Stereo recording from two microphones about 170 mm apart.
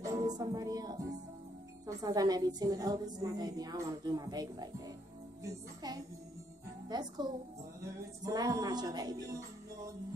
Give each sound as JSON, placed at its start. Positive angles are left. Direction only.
{"t": 0.0, "sound": "music", "side_deg": -20}
{"t": 1.9, "sound": "a woman's voice", "side_deg": -20}